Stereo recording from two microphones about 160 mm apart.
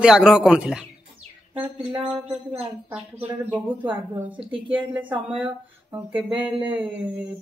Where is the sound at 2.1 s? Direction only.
10° right (ahead or behind).